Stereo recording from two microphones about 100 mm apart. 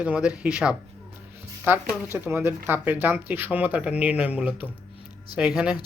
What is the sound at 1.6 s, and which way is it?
Speech, 25° right (ahead or behind).